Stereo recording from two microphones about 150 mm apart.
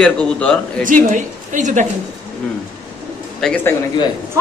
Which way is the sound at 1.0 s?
60° right (ahead or behind).